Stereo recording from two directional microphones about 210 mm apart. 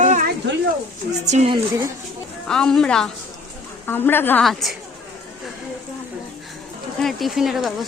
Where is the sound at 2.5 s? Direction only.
5° left (ahead or behind).